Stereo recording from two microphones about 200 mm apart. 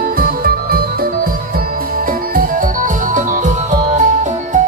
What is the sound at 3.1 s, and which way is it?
Music, 40° right (ahead or behind).